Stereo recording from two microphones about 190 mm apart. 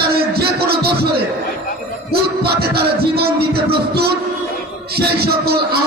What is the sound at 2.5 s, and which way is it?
Music, 55° right (ahead or behind).